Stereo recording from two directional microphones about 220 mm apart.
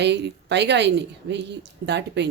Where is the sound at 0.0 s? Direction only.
50° right (ahead or behind).